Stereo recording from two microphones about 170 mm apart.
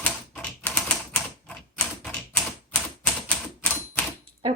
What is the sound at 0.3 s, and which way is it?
Typewriter, 5° left (ahead or behind).